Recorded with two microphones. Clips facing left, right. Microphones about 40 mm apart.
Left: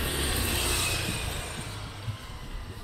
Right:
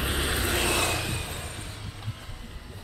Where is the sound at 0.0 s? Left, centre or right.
Centre.